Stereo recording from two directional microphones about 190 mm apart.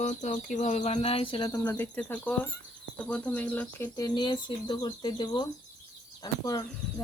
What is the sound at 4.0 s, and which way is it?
Speech, 20° left (ahead or behind).